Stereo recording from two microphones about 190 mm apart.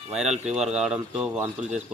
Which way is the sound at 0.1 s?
5° right (ahead or behind).